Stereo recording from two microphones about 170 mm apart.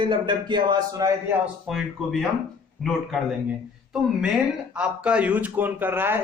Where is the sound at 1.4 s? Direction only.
5° right (ahead or behind).